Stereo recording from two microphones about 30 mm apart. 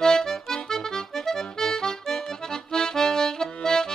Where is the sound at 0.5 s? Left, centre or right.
Left.